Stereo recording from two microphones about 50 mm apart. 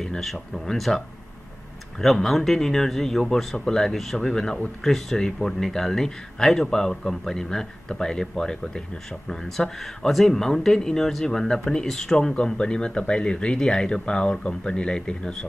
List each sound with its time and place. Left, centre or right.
0.2 s speech: centre